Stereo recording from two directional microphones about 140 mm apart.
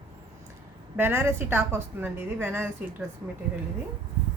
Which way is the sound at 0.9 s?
15° right (ahead or behind).